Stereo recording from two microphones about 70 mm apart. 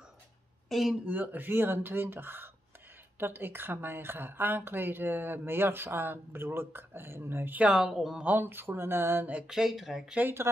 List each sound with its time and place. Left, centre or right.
0.7 s speech: centre
1.0 s speech: right
7.6 s speech: centre
8.2 s speech: right
9.5 s speech: centre
10.1 s speech: right